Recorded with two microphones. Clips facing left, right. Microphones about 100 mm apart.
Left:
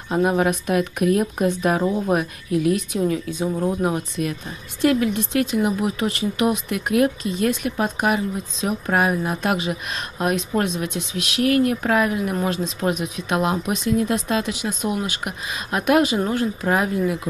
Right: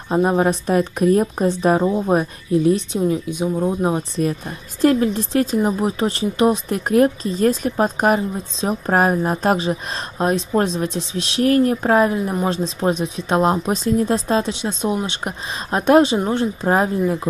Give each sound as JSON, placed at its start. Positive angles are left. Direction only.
{"t": 0.1, "sound": "speech", "side_deg": -30}
{"t": 3.3, "sound": "speech", "side_deg": -15}
{"t": 3.8, "sound": "speech", "side_deg": -30}